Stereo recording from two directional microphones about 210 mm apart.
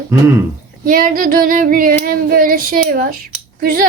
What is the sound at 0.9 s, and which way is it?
Female singing, 40° right (ahead or behind).